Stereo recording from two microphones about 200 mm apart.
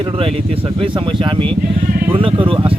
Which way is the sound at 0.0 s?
25° right (ahead or behind).